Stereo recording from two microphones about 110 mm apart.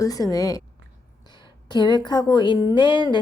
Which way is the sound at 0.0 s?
35° left (ahead or behind).